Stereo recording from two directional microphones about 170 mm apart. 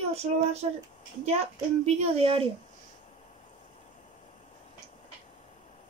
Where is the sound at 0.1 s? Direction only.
40° right (ahead or behind).